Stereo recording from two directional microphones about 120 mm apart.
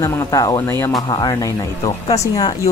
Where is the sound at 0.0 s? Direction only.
30° left (ahead or behind).